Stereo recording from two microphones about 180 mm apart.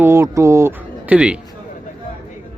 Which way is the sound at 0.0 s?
15° right (ahead or behind).